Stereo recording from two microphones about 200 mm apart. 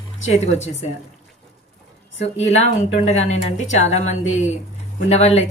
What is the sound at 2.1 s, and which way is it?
Speech, 35° left (ahead or behind).